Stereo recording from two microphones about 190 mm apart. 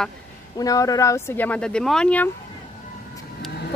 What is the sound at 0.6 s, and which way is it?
Speech, 20° left (ahead or behind).